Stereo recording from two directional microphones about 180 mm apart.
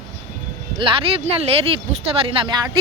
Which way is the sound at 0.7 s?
30° right (ahead or behind).